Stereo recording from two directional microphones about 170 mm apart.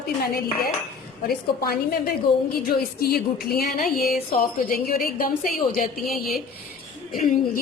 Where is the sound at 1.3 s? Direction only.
65° left (ahead or behind).